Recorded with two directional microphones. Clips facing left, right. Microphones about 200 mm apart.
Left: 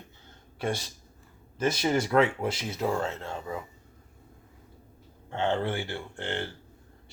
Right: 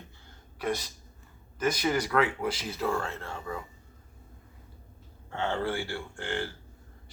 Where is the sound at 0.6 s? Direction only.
25° left (ahead or behind).